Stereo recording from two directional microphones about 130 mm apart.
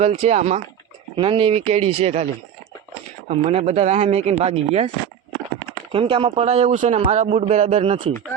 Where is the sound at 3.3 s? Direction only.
55° right (ahead or behind).